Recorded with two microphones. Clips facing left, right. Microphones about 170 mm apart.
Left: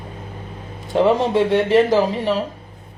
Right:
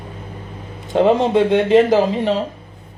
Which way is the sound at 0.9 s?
20° right (ahead or behind).